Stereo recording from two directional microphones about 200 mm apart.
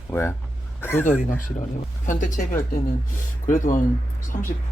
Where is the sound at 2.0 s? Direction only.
40° left (ahead or behind).